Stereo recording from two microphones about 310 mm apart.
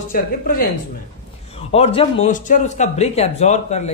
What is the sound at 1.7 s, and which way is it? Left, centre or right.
Speech, centre.